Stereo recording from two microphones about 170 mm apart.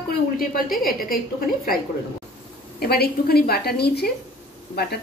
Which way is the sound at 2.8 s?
65° left (ahead or behind).